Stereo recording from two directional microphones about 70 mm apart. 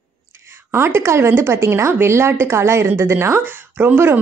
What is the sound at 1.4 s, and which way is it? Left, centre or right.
A woman's voice, right.